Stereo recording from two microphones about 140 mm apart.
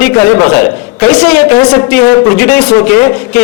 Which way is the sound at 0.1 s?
25° left (ahead or behind).